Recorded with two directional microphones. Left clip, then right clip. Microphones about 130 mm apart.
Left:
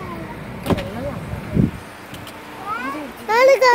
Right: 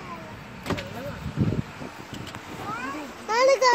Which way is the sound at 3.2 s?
20° right (ahead or behind).